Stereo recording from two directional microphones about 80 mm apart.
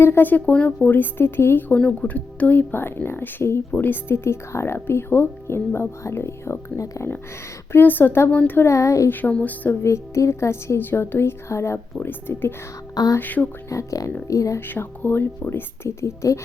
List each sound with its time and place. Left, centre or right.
0.0 s speech: left
7.7 s speech: left
9.0 s speech: left
9.8 s speech: left
12.9 s a sound: left
13.1 s speech: left
13.7 s speech: left
14.7 s speech: left